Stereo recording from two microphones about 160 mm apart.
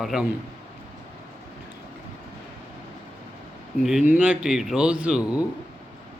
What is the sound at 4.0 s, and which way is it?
Speech, 10° right (ahead or behind).